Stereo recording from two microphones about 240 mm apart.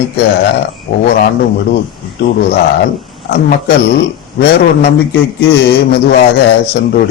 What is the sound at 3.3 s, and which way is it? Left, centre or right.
A man's voice, left.